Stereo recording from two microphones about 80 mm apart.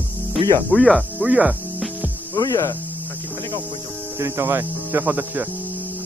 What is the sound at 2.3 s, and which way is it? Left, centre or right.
Speech, left.